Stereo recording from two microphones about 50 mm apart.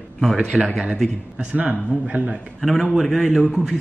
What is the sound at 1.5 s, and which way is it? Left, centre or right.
Speech, right.